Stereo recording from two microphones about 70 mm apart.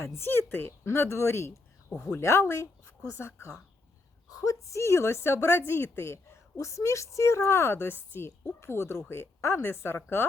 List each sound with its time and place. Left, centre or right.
0.0 s a woman's voice: left
4.3 s a woman's voice: left